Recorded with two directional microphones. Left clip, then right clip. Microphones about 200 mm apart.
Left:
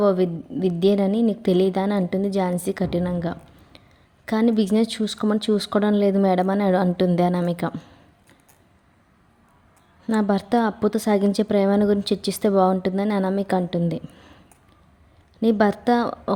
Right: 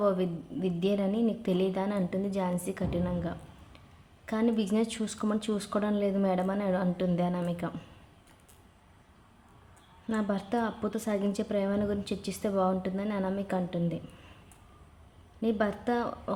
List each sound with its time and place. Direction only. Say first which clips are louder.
0.0 s a woman's voice: left 9 dB; 35° left (ahead or behind)
10.1 s a woman's voice: left 10 dB; 40° left (ahead or behind)
15.4 s a woman's voice: left 10 dB; 45° left (ahead or behind)